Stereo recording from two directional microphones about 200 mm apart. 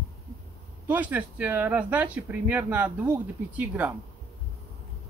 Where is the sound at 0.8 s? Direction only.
10° right (ahead or behind).